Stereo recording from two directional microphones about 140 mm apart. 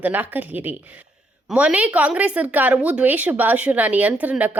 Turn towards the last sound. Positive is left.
turn(degrees=-10)  # may be behind; listen again after turning